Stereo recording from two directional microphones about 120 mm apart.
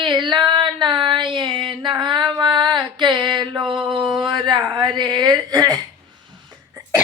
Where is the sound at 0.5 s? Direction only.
40° right (ahead or behind).